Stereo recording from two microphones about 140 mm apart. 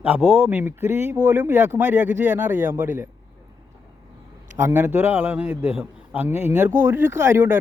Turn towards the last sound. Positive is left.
turn(degrees=-15)  # may be behind; listen again after turning